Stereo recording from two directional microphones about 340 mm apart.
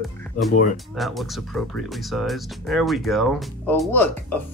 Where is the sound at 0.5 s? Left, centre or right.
Left.